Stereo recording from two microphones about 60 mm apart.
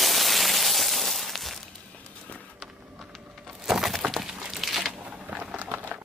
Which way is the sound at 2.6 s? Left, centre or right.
Centre.